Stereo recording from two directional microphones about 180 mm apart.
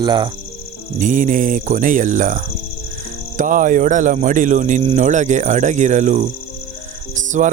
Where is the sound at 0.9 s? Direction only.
45° right (ahead or behind).